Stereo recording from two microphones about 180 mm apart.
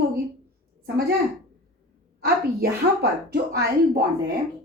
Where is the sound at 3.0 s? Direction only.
60° right (ahead or behind).